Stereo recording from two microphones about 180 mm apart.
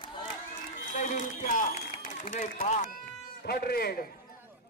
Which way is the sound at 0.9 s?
45° left (ahead or behind).